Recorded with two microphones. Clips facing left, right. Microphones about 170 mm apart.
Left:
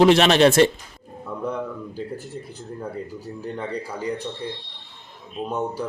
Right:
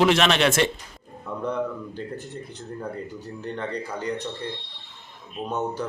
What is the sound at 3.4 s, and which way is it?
Speech, 10° left (ahead or behind).